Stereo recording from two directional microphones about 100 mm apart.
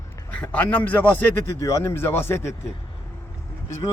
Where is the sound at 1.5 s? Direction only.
30° left (ahead or behind).